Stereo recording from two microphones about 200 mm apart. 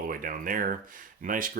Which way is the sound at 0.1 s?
45° right (ahead or behind).